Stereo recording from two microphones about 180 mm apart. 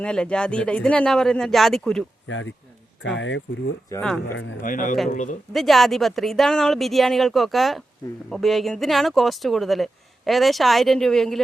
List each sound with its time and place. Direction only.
0.0 s speech: 5° left (ahead or behind)
2.2 s speech: 90° left
3.9 s speech: 15° left (ahead or behind)
4.6 s speech: 50° left (ahead or behind)
5.5 s speech: centre (ahead or behind)